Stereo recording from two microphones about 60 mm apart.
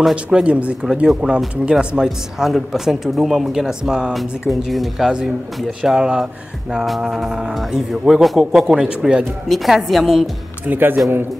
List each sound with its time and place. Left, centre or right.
0.1 s speech: centre
1.0 s speech: centre
2.0 s speech: centre
4.1 s speech: centre
9.5 s speech: centre
10.7 s a man's voice: right